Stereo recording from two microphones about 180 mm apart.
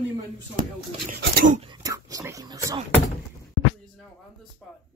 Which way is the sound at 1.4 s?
40° right (ahead or behind).